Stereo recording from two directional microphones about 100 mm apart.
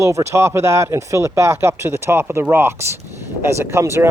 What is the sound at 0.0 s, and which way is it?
Speech, 30° right (ahead or behind).